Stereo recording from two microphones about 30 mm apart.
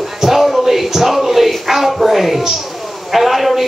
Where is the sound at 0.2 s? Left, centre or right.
Centre.